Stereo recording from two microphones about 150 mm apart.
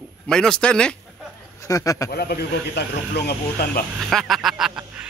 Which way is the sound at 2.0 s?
90° left.